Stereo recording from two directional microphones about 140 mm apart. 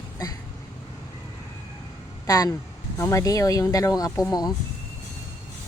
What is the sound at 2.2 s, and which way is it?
Speech, 25° left (ahead or behind).